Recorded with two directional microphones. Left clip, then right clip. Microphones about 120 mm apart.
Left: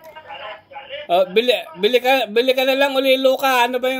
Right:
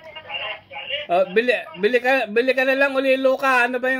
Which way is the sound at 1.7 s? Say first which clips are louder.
Left 3 dB; 5° right (ahead or behind).